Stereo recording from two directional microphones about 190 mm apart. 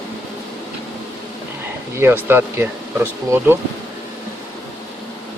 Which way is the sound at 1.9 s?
10° right (ahead or behind).